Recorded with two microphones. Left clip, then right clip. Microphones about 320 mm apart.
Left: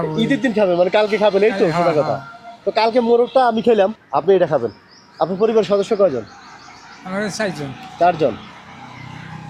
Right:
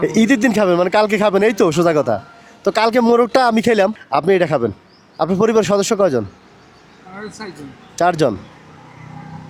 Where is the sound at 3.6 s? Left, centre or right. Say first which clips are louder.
Even; right.